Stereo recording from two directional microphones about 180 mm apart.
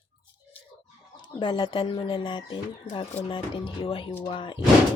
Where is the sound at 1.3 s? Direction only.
25° left (ahead or behind).